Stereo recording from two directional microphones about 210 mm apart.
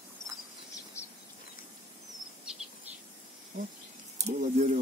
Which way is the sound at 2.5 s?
5° right (ahead or behind).